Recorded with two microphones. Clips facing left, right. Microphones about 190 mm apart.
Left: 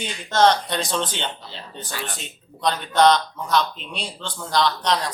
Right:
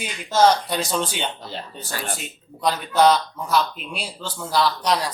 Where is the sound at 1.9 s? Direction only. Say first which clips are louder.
Right 3 dB; 45° right (ahead or behind).